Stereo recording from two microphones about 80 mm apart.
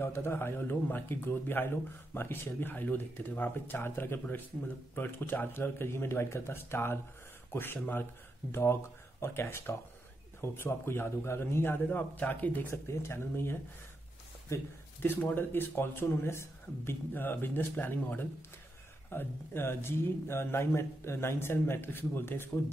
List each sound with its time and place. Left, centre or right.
0.0 s speech: left
12.6 s speech: left
15.0 s speech: left